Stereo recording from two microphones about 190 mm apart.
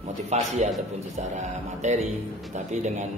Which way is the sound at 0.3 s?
35° right (ahead or behind).